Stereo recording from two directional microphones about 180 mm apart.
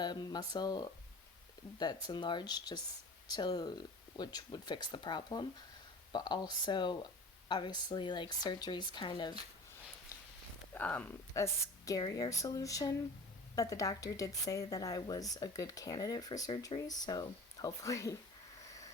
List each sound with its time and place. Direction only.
0.0 s speech: 25° left (ahead or behind)
10.8 s speech: 10° left (ahead or behind)